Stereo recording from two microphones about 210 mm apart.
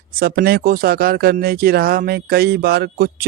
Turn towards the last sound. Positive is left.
turn(degrees=-45)  # may be behind; listen again after turning